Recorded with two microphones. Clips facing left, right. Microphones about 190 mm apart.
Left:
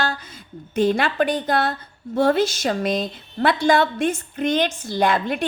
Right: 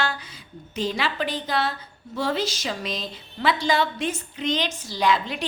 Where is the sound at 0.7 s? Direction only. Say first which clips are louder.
Left 7 dB; 55° left (ahead or behind).